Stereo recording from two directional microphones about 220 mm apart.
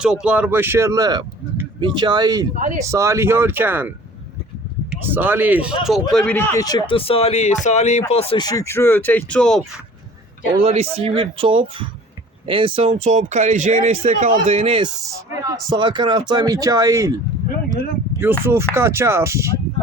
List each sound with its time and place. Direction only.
0.0 s speech: 5° right (ahead or behind)
10.6 s speech: 25° right (ahead or behind)
18.1 s a sound: 15° right (ahead or behind)
18.4 s speech: 10° right (ahead or behind)